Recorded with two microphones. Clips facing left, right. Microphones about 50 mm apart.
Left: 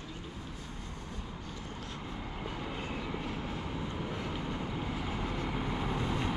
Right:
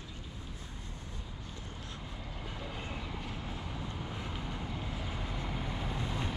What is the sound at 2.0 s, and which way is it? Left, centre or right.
Vehicle, centre.